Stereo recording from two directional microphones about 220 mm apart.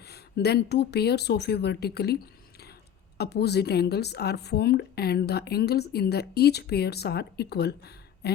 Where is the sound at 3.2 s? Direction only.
50° left (ahead or behind).